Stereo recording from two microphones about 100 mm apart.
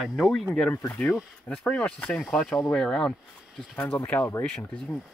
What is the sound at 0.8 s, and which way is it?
Speech, 15° left (ahead or behind).